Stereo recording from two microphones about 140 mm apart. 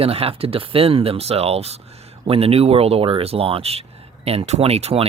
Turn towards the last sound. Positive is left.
turn(degrees=-45)  # may be behind; listen again after turning